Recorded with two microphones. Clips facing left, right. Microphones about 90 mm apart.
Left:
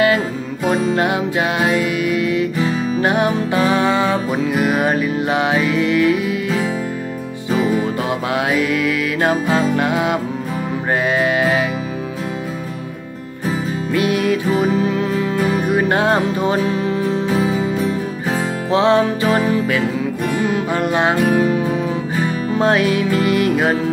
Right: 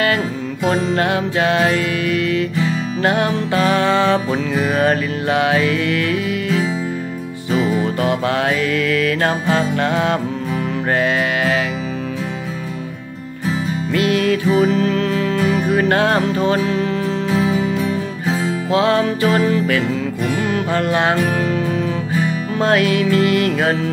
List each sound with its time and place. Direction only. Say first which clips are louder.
0.7 s music: left 1 dB; 15° left (ahead or behind)
13.9 s music: even; 20° left (ahead or behind)